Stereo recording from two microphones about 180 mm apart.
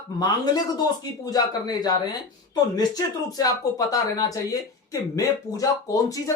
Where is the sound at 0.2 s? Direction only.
20° left (ahead or behind).